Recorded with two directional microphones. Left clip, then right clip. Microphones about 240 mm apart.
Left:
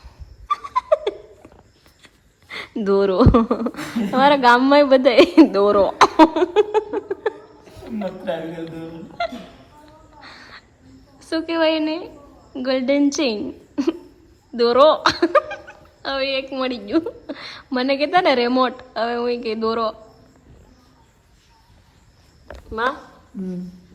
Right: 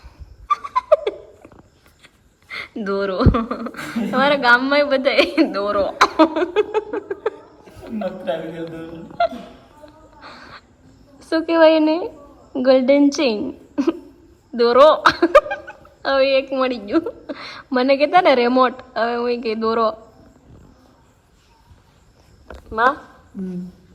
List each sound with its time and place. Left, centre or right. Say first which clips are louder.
0.5 s a sound: right 3 dB; centre
2.5 s a woman's voice: left 4 dB; left; by 9.3 s centre
11.3 s a woman's voice: right 6 dB; centre